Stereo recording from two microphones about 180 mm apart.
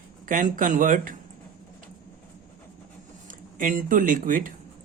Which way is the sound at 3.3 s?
50° right (ahead or behind).